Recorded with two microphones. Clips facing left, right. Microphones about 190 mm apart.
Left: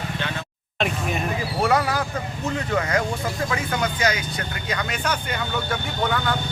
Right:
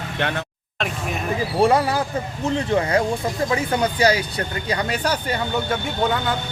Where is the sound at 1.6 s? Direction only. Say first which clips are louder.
Right 4 dB; 30° right (ahead or behind).